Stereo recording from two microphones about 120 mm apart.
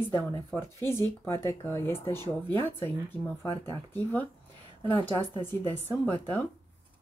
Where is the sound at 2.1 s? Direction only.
35° right (ahead or behind).